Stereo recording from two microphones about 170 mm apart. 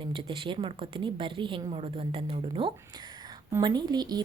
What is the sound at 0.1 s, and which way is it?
A woman's voice, 30° right (ahead or behind).